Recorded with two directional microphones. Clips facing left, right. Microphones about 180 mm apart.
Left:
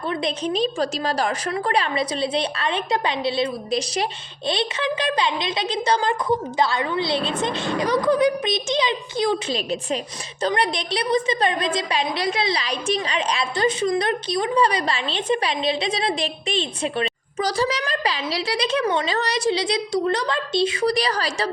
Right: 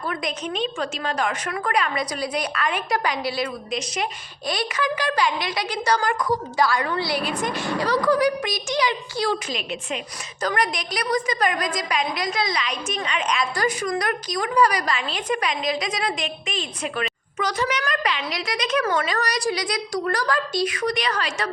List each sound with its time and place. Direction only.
0.1 s a woman's voice: 30° left (ahead or behind)
9.5 s a woman's voice: 35° left (ahead or behind)